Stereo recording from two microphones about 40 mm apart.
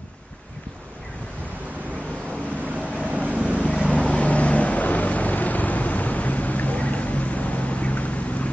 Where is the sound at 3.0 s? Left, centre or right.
Right.